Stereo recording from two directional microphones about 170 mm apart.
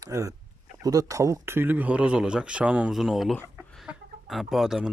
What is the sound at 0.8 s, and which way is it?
Speech, 20° right (ahead or behind).